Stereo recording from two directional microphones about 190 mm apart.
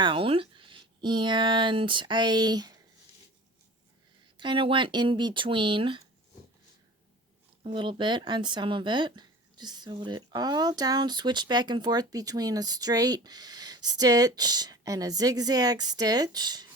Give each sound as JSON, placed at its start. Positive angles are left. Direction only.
{"t": 0.0, "sound": "speech", "side_deg": -25}
{"t": 4.4, "sound": "speech", "side_deg": -25}
{"t": 7.6, "sound": "speech", "side_deg": -25}